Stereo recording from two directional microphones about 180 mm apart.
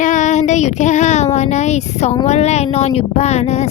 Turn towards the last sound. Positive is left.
turn(degrees=40)  # may be behind; listen again after turning